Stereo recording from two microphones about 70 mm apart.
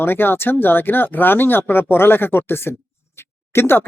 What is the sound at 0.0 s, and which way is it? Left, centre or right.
Speech, left.